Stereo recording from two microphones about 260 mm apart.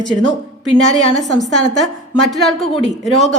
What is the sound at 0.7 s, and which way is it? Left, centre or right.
Speech, left.